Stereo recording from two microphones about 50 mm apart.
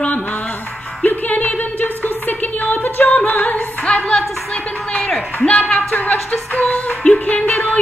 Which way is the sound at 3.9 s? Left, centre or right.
Centre.